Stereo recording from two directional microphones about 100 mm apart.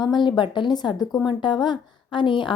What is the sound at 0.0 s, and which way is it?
A woman's voice, 50° left (ahead or behind).